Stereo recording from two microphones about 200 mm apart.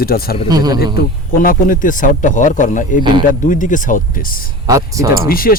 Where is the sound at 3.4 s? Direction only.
40° left (ahead or behind).